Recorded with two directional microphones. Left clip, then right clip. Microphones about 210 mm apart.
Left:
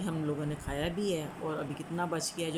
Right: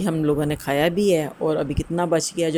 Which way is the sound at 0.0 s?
35° right (ahead or behind).